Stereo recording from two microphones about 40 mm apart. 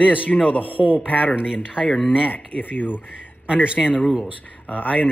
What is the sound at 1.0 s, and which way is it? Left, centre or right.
Speech, left.